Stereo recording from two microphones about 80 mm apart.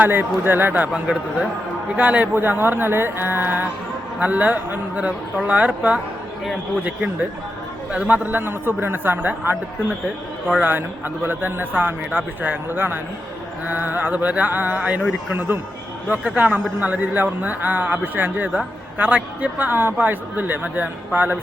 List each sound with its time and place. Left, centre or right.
0.0 s speech: right
1.0 s a man's voice: centre
10.6 s a man's voice: right